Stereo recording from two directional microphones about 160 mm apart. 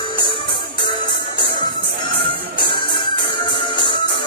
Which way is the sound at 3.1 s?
30° left (ahead or behind).